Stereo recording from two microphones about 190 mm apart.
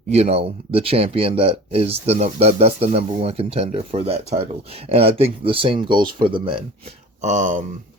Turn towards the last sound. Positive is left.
turn(degrees=-40)  # may be behind; listen again after turning